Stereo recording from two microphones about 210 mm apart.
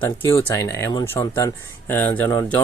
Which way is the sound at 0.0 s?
10° left (ahead or behind).